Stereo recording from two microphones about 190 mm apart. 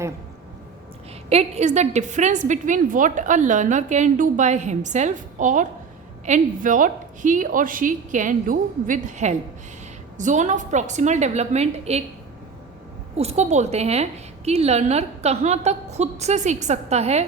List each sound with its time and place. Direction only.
1.3 s a woman's voice: 35° right (ahead or behind)
13.1 s a woman's voice: 35° right (ahead or behind)